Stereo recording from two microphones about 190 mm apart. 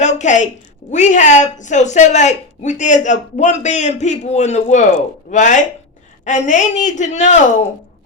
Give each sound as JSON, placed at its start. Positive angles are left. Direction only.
{"t": 0.0, "sound": "a woman's voice", "side_deg": 40}